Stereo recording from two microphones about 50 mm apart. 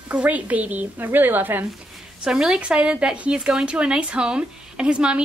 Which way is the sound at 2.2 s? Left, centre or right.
Centre.